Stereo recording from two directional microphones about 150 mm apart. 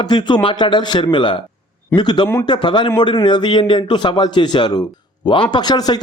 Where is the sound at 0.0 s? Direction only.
30° left (ahead or behind).